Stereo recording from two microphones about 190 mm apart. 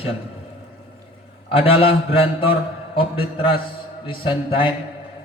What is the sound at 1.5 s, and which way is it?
A man's voice, 30° left (ahead or behind).